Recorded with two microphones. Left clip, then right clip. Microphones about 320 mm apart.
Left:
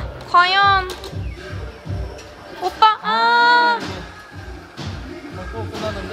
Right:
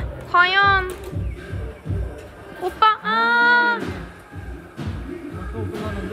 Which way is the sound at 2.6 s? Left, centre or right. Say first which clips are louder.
Left 3 dB; centre.